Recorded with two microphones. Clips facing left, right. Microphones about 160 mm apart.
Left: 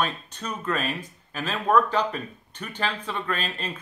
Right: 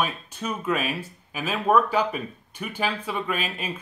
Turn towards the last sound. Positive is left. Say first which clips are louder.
# right 1 dB
turn(degrees=-10)  # may be behind; listen again after turning